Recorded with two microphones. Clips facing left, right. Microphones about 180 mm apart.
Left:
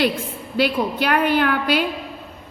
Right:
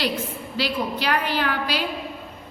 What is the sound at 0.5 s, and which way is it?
A woman's voice, 55° left (ahead or behind).